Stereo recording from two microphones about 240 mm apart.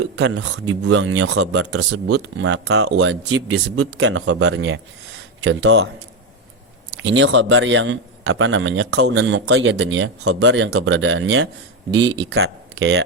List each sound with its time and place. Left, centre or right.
0.0 s speech: right
7.0 s speech: right